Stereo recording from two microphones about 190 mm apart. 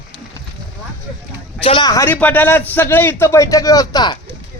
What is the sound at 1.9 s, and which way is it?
A man's voice, 15° left (ahead or behind).